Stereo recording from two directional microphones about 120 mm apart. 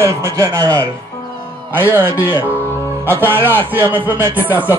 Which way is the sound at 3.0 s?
15° right (ahead or behind).